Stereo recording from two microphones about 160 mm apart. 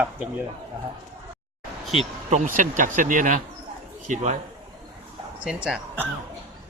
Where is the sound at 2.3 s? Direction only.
50° right (ahead or behind).